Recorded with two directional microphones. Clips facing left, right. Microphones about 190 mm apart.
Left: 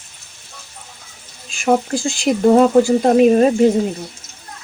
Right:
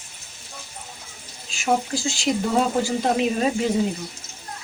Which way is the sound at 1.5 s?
50° left (ahead or behind).